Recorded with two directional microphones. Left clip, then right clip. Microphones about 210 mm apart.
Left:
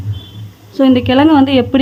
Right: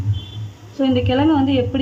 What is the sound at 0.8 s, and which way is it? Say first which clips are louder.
A woman's voice: left 7 dB; 40° left (ahead or behind).